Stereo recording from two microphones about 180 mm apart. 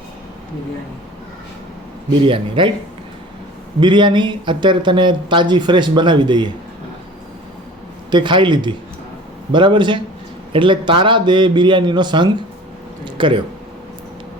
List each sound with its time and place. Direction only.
2.0 s speech: 30° right (ahead or behind)
3.8 s speech: 25° right (ahead or behind)
8.1 s speech: 25° right (ahead or behind)